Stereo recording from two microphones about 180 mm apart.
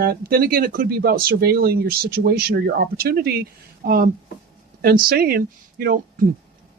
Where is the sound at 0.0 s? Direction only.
55° right (ahead or behind).